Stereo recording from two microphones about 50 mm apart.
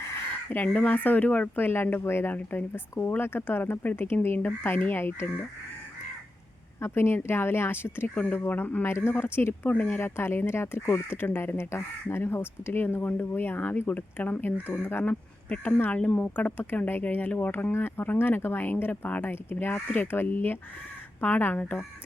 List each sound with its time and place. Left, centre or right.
0.5 s speech: left
1.5 s speech: left
2.3 s speech: left
3.0 s speech: left
6.8 s speech: left
8.4 s speech: left
9.0 s speech: left
9.6 s speech: left
10.0 s speech: left
15.0 s speech: left
19.3 s speech: left